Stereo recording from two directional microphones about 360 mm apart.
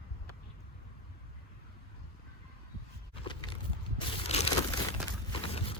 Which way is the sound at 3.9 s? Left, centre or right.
Centre.